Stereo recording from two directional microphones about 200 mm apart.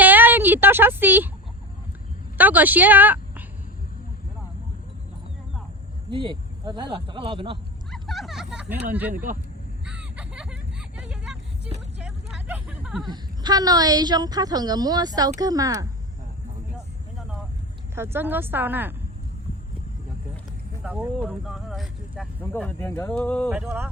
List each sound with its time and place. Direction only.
0.0 s a sound: 10° right (ahead or behind)
2.4 s a woman's voice: 10° right (ahead or behind)
6.1 s a woman's voice: 20° right (ahead or behind)
7.9 s a sound: centre (ahead or behind)
8.9 s speech: 10° right (ahead or behind)
10.0 s a sound: 5° right (ahead or behind)
12.0 s vehicle: 5° right (ahead or behind)
13.1 s a woman's voice: 20° right (ahead or behind)
17.9 s speech: 10° right (ahead or behind)
20.8 s speech: 5° right (ahead or behind)
22.5 s speech: 10° left (ahead or behind)
23.5 s speech: 5° right (ahead or behind)